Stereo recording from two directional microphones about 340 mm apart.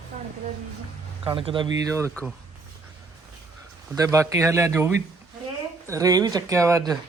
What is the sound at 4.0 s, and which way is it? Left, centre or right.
A man's voice, centre.